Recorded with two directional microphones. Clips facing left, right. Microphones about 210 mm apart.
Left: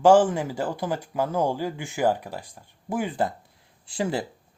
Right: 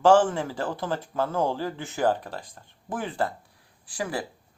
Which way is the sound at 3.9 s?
25° left (ahead or behind).